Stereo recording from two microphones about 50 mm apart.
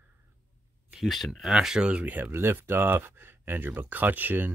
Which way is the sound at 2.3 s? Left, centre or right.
Right.